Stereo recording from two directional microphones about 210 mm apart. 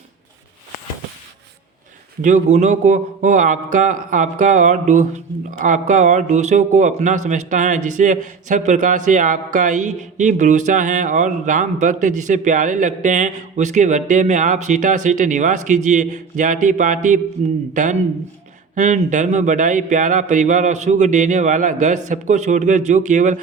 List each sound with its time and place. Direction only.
2.2 s a man's voice: 35° right (ahead or behind)
18.7 s a man's voice: 35° right (ahead or behind)